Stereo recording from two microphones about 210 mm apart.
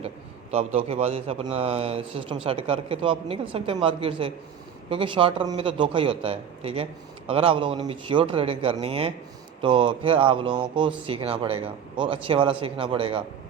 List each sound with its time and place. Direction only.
0.5 s a man's voice: 30° right (ahead or behind)